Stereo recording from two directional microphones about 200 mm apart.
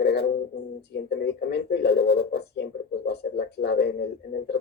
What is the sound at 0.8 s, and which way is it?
Speech, 55° left (ahead or behind).